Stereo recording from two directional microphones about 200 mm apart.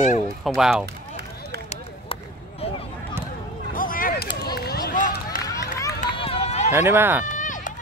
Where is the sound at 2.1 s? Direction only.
25° left (ahead or behind).